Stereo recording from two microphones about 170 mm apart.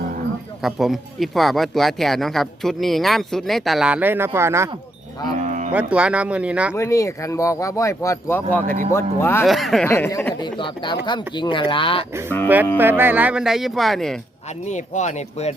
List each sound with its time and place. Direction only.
0.6 s speech: centre (ahead or behind)
5.4 s livestock: 45° right (ahead or behind)
5.7 s speech: 5° right (ahead or behind)
6.7 s speech: 15° left (ahead or behind)
9.5 s speech: centre (ahead or behind)
9.8 s speech: 15° left (ahead or behind)
10.4 s speech: 25° left (ahead or behind)
12.7 s speech: 10° right (ahead or behind)
14.7 s speech: 45° left (ahead or behind)